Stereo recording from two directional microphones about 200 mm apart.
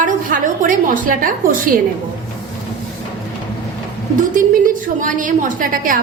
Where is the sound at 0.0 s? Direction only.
40° right (ahead or behind).